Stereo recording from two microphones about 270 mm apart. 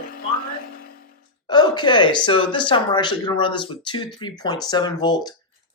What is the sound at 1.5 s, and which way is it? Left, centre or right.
Speech, centre.